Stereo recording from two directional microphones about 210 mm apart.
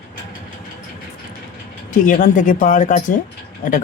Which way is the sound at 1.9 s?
40° left (ahead or behind).